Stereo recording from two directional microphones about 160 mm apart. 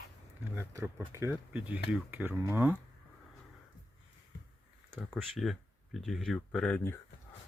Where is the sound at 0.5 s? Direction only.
15° right (ahead or behind).